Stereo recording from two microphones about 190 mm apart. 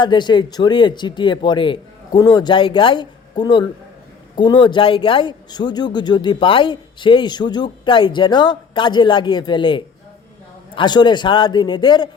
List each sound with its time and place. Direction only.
0.0 s a man's voice: 25° left (ahead or behind)